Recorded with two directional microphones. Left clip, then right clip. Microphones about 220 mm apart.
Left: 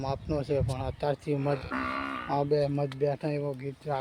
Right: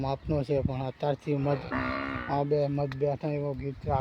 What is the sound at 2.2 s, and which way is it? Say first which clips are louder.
Speech: even; 10° left (ahead or behind).